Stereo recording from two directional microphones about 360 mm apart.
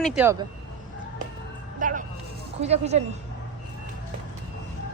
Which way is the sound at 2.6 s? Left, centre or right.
Centre.